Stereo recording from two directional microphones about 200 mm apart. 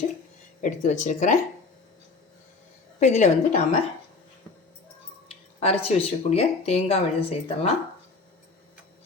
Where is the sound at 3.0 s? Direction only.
35° left (ahead or behind).